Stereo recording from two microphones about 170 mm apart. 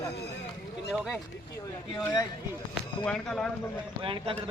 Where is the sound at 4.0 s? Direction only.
30° right (ahead or behind).